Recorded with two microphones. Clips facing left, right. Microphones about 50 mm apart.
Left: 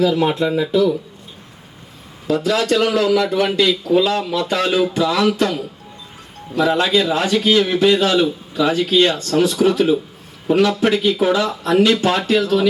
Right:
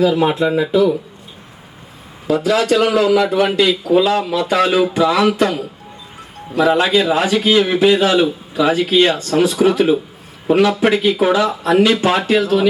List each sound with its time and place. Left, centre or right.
0.0 s speech: centre
2.2 s speech: right
2.6 s a man's voice: centre